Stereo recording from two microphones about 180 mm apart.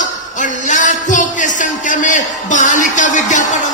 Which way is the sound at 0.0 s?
45° left (ahead or behind).